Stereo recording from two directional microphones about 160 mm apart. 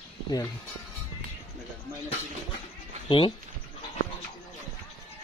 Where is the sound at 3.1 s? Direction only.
30° left (ahead or behind).